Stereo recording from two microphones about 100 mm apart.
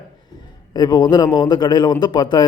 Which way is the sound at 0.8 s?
45° left (ahead or behind).